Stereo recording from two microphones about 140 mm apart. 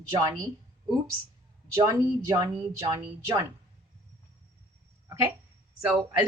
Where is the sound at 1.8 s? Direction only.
25° right (ahead or behind).